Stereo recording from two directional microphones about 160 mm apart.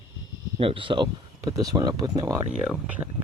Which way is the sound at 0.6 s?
35° right (ahead or behind).